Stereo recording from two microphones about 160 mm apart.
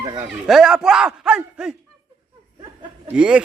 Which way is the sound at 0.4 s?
Centre (ahead or behind).